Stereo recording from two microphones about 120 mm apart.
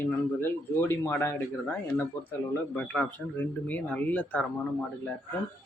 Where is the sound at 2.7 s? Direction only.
10° left (ahead or behind).